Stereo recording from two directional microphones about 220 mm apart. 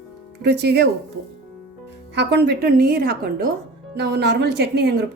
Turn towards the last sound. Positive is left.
turn(degrees=-50)  # may be behind; listen again after turning